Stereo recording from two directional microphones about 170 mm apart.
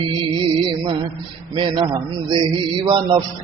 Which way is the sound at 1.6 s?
30° right (ahead or behind).